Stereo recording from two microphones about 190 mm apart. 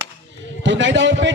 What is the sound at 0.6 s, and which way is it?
Speech, 75° right (ahead or behind).